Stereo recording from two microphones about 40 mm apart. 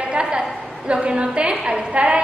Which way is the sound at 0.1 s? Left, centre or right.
Right.